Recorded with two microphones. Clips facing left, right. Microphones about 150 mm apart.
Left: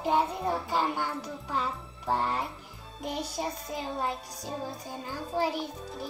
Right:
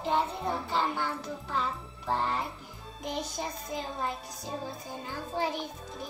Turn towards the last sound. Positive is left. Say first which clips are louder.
# left 2 dB
turn(degrees=5)  # may be behind; listen again after turning